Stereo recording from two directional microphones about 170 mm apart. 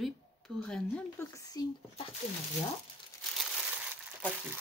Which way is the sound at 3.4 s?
5° right (ahead or behind).